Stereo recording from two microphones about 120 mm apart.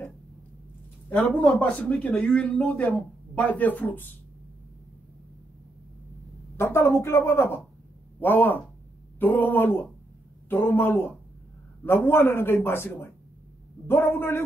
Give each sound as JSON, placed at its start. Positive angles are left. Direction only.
{"t": 1.1, "sound": "speech", "side_deg": 15}
{"t": 6.5, "sound": "a man's voice", "side_deg": 20}